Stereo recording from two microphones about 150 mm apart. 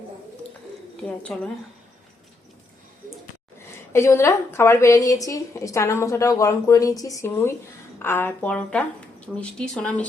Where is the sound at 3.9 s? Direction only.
20° left (ahead or behind).